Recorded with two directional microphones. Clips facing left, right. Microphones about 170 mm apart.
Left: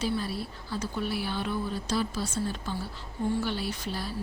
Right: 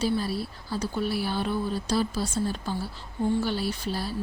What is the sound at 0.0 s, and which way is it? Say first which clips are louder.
Speech: right 4 dB; 35° right (ahead or behind).